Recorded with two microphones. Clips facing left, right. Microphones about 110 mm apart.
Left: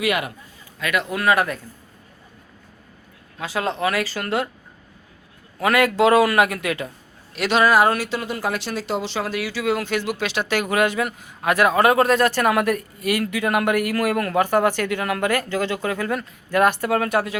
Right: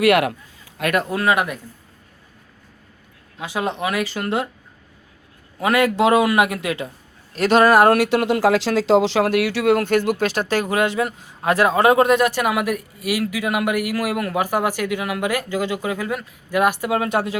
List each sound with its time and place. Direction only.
0.0 s a man's voice: 75° right (ahead or behind)
0.8 s a man's voice: 55° right (ahead or behind)
1.0 s speech: 25° right (ahead or behind)
3.3 s speech: 15° right (ahead or behind)
5.5 s speech: 20° right (ahead or behind)
7.3 s speech: 45° right (ahead or behind); by 17.3 s 25° right (ahead or behind)